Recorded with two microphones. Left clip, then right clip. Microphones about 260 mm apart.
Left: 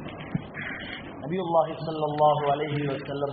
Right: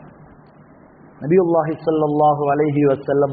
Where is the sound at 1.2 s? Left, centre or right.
Right.